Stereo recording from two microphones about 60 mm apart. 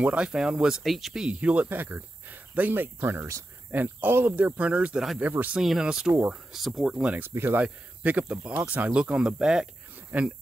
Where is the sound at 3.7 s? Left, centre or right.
Right.